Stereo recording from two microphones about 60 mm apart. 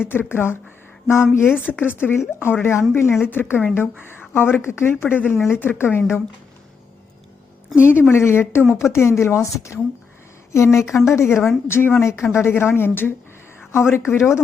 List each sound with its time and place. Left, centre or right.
0.0 s a woman's voice: left
1.6 s a woman's voice: left
3.2 s a woman's voice: left
7.8 s a woman's voice: left